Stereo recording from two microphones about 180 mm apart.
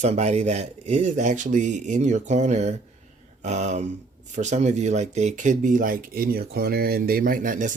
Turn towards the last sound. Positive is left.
turn(degrees=-45)  # may be behind; listen again after turning